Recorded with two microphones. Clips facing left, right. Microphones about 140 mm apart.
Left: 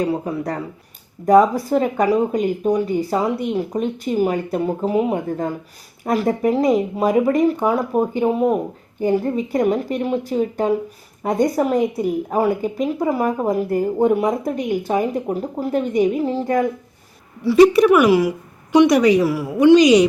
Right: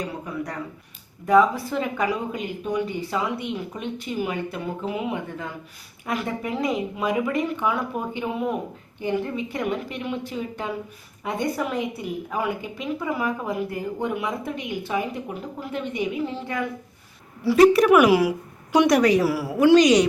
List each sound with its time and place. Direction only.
0.0 s a woman's voice: 35° left (ahead or behind)
17.4 s a woman's voice: 5° right (ahead or behind)